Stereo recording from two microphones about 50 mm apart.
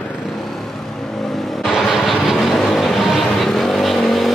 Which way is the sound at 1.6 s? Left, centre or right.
Centre.